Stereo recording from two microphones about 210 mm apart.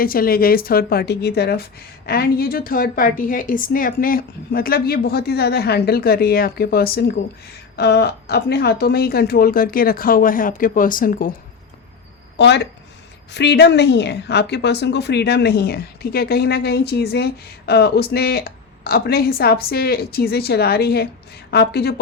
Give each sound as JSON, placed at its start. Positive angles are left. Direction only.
{"t": 0.0, "sound": "a woman's voice", "side_deg": 45}
{"t": 12.4, "sound": "a woman's voice", "side_deg": 55}